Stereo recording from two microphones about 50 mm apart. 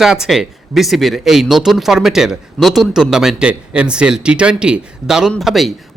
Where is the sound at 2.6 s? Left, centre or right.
Centre.